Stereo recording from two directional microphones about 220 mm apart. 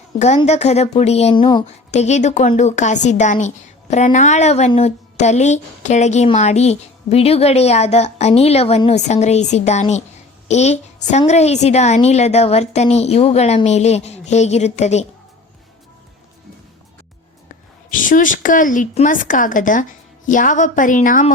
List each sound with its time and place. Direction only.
0.2 s a woman's voice: 30° left (ahead or behind)
1.6 s a woman's voice: 30° left (ahead or behind)
17.9 s a woman's voice: 35° left (ahead or behind)